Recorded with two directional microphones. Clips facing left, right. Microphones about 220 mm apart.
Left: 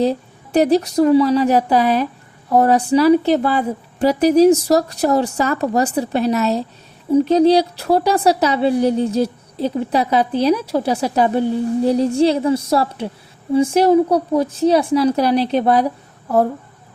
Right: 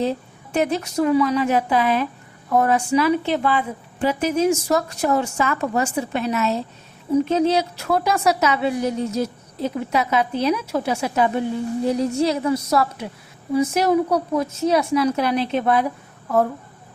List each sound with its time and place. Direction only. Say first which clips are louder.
0.0 s a woman's voice: left 5 dB; 35° left (ahead or behind)